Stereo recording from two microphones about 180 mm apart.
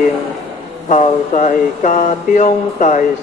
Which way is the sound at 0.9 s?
45° left (ahead or behind).